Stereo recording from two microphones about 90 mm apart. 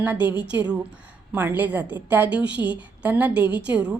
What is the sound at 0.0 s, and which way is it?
A woman's voice, 20° right (ahead or behind).